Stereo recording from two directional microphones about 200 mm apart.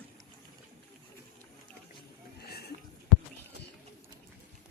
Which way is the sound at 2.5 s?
55° left (ahead or behind).